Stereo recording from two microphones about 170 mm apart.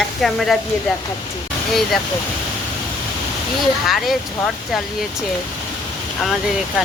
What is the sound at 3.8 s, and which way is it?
Speech, centre (ahead or behind).